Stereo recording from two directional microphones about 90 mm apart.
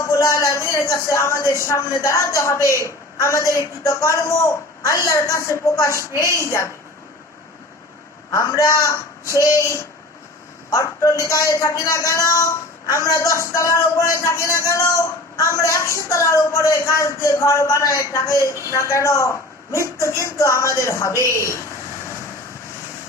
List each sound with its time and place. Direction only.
0.1 s a woman's voice: 40° left (ahead or behind)
8.3 s a woman's voice: 35° left (ahead or behind)